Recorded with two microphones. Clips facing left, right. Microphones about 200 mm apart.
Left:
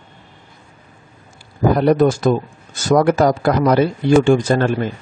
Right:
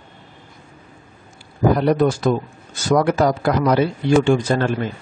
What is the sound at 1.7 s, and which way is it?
A man's voice, 45° left (ahead or behind).